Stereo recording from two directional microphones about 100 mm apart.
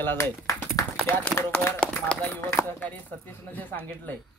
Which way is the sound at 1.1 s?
15° left (ahead or behind).